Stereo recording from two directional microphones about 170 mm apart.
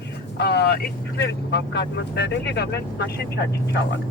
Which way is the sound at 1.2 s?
90° left.